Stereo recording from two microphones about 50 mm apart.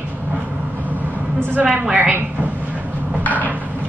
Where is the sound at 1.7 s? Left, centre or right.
Right.